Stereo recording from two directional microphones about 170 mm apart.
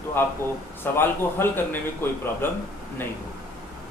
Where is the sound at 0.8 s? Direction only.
15° left (ahead or behind).